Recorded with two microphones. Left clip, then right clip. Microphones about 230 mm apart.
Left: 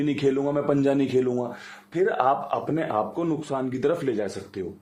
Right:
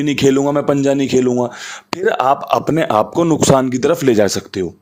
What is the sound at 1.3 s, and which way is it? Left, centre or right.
Speech, right.